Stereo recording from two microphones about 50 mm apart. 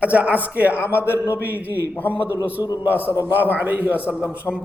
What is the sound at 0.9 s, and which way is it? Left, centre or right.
Speech, left.